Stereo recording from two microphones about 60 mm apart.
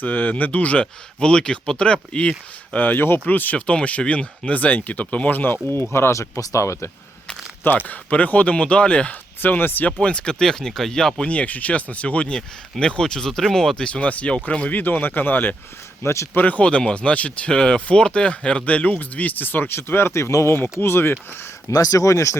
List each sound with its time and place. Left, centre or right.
0.0 s speech: left
2.7 s speech: left
7.6 s speech: left
9.4 s speech: left
10.0 s speech: centre
11.3 s speech: left
16.0 s speech: left
16.3 s speech: left
21.7 s speech: left